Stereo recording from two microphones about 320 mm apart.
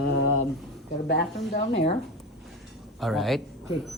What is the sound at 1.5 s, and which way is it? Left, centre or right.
Speech, left.